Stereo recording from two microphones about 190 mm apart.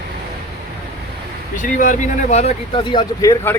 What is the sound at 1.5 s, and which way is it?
Speech, 40° left (ahead or behind).